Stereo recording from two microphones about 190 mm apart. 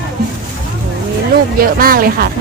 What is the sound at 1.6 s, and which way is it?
Speech, 50° right (ahead or behind).